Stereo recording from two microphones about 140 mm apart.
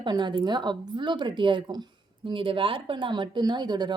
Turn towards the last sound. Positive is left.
turn(degrees=-30)  # may be behind; listen again after turning